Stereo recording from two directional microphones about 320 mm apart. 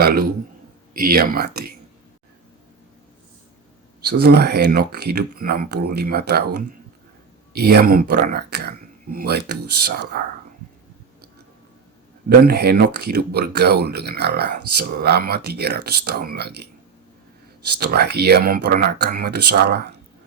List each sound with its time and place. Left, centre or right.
0.0 s a man's voice: right
4.0 s speech: right
12.5 s speech: right
17.7 s speech: right